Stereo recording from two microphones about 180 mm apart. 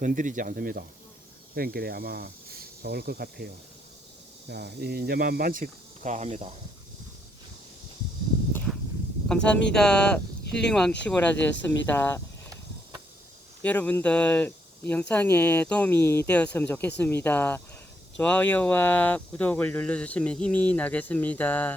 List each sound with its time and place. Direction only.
0.0 s speech: 45° right (ahead or behind)
9.3 s speech: 5° left (ahead or behind)
10.4 s a sound: 70° left (ahead or behind)
10.7 s speech: 5° left (ahead or behind)
13.6 s speech: 10° left (ahead or behind)